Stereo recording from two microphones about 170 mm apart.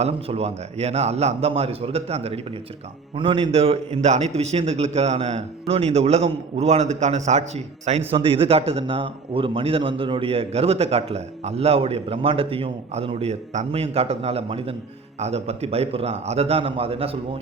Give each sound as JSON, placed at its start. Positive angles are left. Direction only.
{"t": 0.0, "sound": "a man's voice", "side_deg": -35}